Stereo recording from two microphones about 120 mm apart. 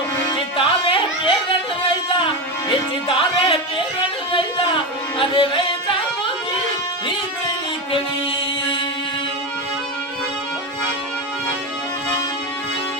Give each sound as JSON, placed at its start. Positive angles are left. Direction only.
{"t": 0.3, "sound": "music", "side_deg": 45}